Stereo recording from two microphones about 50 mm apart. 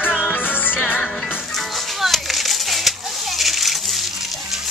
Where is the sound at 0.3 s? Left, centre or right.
Left.